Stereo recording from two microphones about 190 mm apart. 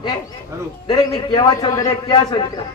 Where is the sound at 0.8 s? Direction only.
25° left (ahead or behind).